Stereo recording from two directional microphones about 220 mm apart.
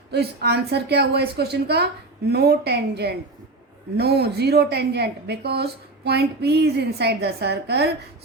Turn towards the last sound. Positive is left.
turn(degrees=-50)  # may be behind; listen again after turning